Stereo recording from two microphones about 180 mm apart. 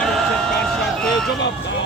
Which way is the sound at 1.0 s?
5° left (ahead or behind).